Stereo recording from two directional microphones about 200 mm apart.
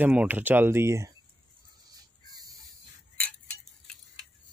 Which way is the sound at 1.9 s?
20° right (ahead or behind).